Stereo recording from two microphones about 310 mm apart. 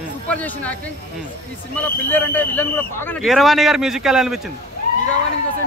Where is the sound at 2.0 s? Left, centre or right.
Centre.